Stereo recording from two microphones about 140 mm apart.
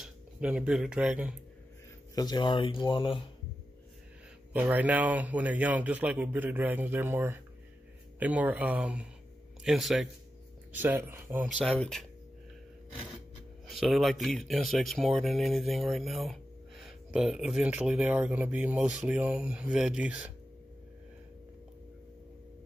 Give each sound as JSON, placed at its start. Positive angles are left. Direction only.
{"t": 0.0, "sound": "speech", "side_deg": -5}
{"t": 2.1, "sound": "speech", "side_deg": 30}
{"t": 4.5, "sound": "speech", "side_deg": -10}
{"t": 10.7, "sound": "speech", "side_deg": -15}
{"t": 11.4, "sound": "speech", "side_deg": 0}
{"t": 13.7, "sound": "speech", "side_deg": 0}